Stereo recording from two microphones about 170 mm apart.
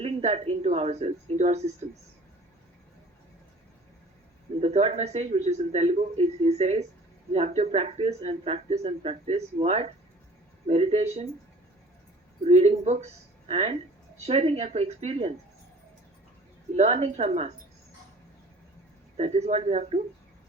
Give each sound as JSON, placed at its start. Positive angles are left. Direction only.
{"t": 0.0, "sound": "speech", "side_deg": -40}
{"t": 4.6, "sound": "speech", "side_deg": -40}
{"t": 12.5, "sound": "speech", "side_deg": -40}
{"t": 16.7, "sound": "speech", "side_deg": -40}
{"t": 19.1, "sound": "speech", "side_deg": -35}